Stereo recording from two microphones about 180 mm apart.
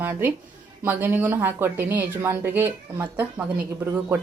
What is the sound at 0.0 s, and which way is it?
A woman's voice, 10° right (ahead or behind).